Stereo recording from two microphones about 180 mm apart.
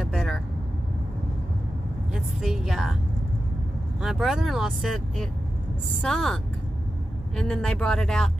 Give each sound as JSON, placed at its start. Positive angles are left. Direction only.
{"t": 0.0, "sound": "vehicle", "side_deg": 0}
{"t": 2.1, "sound": "a woman's voice", "side_deg": 0}
{"t": 4.0, "sound": "speech", "side_deg": 0}